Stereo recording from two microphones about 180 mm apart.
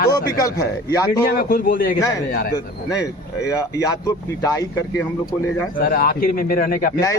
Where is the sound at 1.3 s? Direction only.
55° left (ahead or behind).